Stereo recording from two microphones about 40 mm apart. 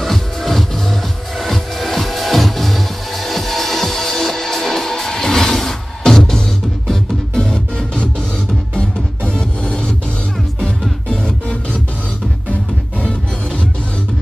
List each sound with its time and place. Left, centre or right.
0.0 s music: centre; by 9.9 s left
11.1 s music: left
13.0 s music: left